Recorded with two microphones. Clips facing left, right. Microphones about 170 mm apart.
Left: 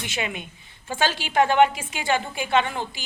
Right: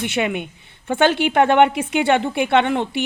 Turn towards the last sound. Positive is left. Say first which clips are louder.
# right 6 dB
turn(degrees=-65)  # may be behind; listen again after turning